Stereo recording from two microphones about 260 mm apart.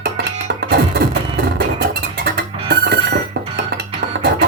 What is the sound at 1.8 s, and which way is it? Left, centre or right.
Music, right.